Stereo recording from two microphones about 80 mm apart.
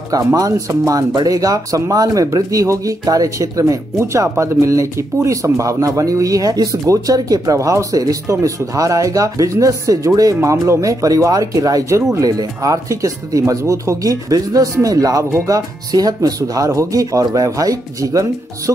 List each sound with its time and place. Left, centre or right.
0.1 s speech: right